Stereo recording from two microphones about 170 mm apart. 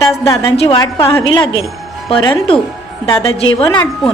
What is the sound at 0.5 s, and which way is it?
A woman's voice, 30° left (ahead or behind).